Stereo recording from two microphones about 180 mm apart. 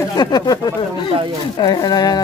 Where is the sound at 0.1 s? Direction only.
25° left (ahead or behind).